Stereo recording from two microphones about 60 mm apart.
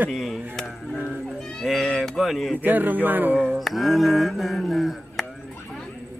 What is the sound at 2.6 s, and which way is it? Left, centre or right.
Speech, right.